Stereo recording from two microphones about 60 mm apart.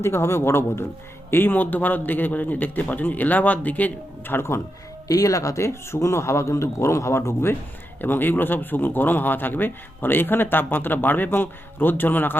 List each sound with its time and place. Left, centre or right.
0.0 s a man's voice: left
5.0 s a man's voice: left
8.0 s speech: left